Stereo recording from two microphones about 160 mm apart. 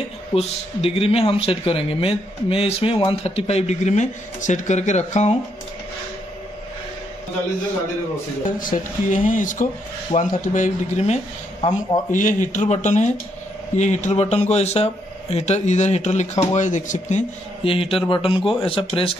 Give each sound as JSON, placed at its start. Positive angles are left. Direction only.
{"t": 0.3, "sound": "speech", "side_deg": 40}
{"t": 8.5, "sound": "speech", "side_deg": 55}
{"t": 17.6, "sound": "speech", "side_deg": 35}